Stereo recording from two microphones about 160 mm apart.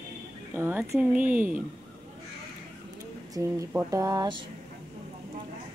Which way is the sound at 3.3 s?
20° right (ahead or behind).